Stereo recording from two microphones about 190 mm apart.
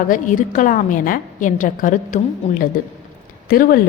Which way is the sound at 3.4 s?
50° left (ahead or behind).